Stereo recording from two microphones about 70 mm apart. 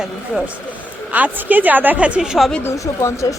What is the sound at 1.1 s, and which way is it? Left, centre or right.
Speech, right.